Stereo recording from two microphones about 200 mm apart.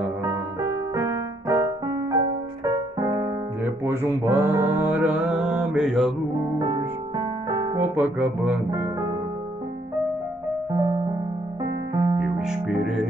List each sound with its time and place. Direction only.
0.2 s music: 15° right (ahead or behind)
6.8 s music: 20° right (ahead or behind)
10.7 s music: 20° right (ahead or behind)
12.2 s music: 5° right (ahead or behind)